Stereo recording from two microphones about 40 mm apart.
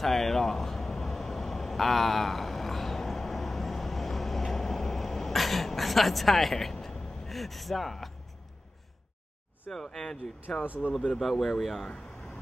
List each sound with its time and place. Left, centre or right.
0.0 s a sound: centre
9.7 s speech: centre
10.5 s speech: left
11.1 s speech: centre